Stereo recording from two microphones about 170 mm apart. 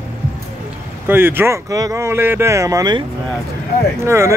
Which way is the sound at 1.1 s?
10° right (ahead or behind).